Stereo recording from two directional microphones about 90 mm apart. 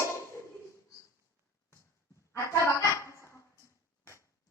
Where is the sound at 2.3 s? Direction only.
30° left (ahead or behind).